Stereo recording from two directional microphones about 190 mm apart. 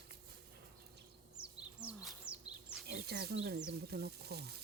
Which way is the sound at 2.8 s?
55° right (ahead or behind).